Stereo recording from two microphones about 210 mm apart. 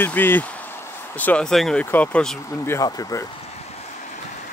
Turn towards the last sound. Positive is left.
turn(degrees=15)  # may be behind; listen again after turning